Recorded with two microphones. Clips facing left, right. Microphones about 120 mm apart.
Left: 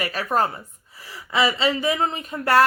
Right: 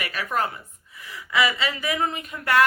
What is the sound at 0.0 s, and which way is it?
Speech, 35° left (ahead or behind).